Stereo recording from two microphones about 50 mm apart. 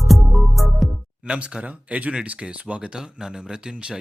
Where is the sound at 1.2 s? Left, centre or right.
Right.